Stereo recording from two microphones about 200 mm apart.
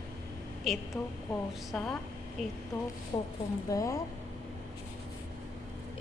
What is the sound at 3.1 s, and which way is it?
Speech, 20° left (ahead or behind).